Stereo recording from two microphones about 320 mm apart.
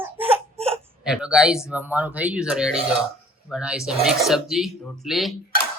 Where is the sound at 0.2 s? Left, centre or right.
Centre.